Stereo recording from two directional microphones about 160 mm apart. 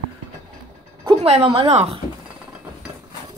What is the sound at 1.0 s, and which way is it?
Speech, 35° right (ahead or behind).